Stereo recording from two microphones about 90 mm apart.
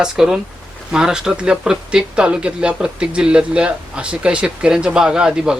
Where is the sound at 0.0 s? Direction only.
5° right (ahead or behind).